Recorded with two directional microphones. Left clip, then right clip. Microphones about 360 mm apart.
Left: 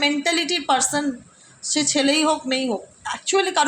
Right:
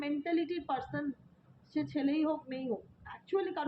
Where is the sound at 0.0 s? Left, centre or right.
Left.